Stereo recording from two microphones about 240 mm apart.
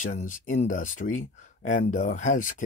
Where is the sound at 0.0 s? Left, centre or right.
Left.